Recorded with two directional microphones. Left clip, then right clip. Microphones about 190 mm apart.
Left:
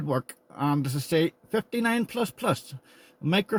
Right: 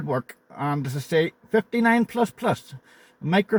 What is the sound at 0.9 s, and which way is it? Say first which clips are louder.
Speech: right 3 dB; 10° left (ahead or behind).